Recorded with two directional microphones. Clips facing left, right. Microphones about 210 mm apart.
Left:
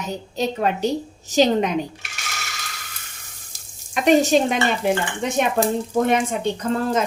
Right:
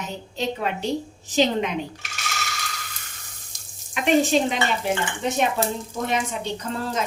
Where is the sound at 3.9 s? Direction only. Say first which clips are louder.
Left 4 dB; 40° left (ahead or behind).